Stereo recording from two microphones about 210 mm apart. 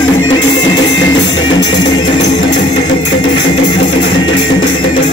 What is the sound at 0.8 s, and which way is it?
Music, 60° left (ahead or behind).